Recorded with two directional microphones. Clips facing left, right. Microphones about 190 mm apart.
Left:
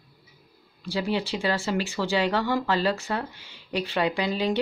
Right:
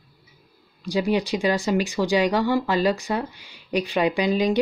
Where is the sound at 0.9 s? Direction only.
15° right (ahead or behind).